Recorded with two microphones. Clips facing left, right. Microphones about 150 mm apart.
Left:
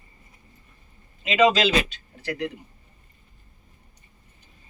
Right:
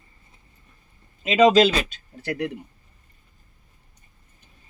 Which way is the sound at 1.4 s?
40° right (ahead or behind).